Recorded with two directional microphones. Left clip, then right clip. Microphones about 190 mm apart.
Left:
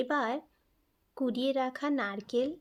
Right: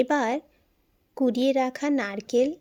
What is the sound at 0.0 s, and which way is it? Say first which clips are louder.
Speech: right 7 dB; 30° right (ahead or behind).